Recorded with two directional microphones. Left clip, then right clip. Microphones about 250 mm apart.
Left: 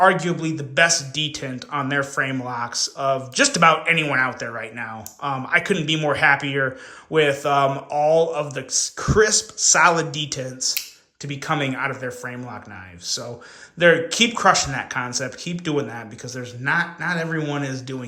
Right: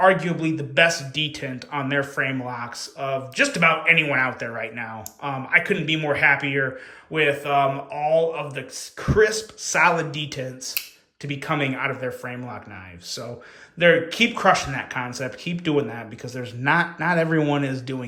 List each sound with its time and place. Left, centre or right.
0.0 s speech: centre